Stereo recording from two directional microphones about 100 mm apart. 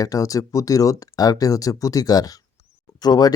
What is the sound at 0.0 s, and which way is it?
Speech, 35° left (ahead or behind).